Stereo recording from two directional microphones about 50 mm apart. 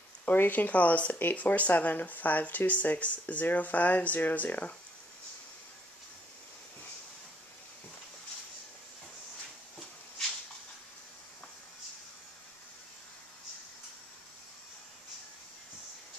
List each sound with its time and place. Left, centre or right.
0.2 s speech: left